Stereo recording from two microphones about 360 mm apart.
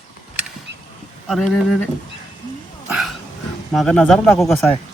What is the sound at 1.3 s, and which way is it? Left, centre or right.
Speech, centre.